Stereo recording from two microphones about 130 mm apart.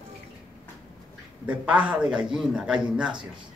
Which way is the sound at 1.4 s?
10° right (ahead or behind).